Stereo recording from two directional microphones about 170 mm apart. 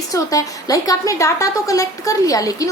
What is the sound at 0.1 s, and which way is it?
A woman's voice, 20° left (ahead or behind).